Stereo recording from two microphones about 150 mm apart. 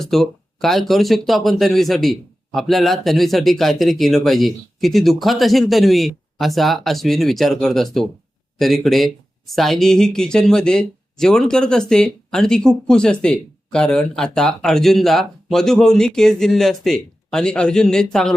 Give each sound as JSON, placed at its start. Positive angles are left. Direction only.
{"t": 0.0, "sound": "speech", "side_deg": 0}